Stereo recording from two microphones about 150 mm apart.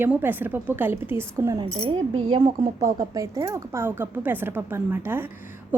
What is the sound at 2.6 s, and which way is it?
A woman's voice, 25° right (ahead or behind).